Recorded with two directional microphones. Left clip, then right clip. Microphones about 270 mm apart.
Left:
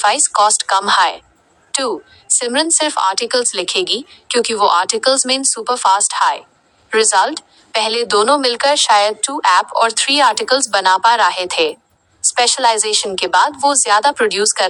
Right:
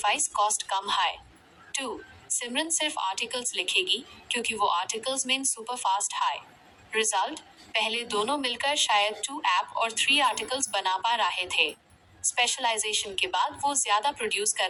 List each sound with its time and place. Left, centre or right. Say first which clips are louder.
0.0 s a woman's voice: left 13 dB; left